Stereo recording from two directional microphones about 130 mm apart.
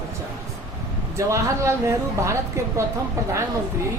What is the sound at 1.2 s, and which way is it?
A woman's voice, 25° right (ahead or behind).